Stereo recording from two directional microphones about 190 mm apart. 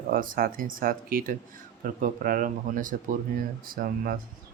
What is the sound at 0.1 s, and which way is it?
Speech, 45° right (ahead or behind).